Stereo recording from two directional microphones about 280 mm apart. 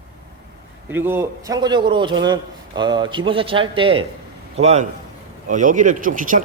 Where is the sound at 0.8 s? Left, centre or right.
Centre.